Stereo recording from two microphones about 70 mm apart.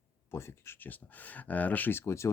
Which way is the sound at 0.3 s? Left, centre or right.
Left.